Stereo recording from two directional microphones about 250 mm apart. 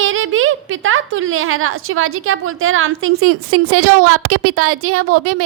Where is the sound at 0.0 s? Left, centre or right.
Right.